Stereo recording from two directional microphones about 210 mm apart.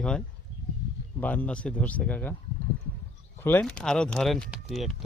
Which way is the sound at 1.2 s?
10° left (ahead or behind).